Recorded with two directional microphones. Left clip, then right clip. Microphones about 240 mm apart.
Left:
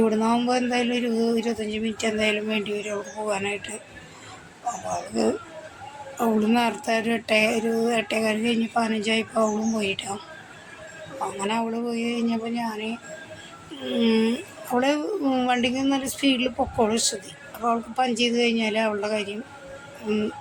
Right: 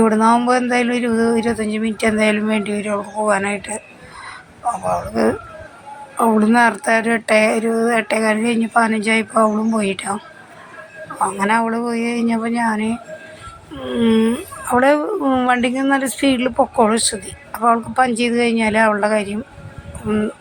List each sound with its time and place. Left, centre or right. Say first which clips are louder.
0.0 s speech: right 8 dB; centre
6.5 s speech: right 9 dB; centre
11.2 s speech: right 10 dB; centre